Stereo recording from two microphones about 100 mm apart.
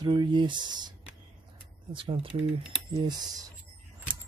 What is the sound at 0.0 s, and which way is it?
Speech, 50° right (ahead or behind).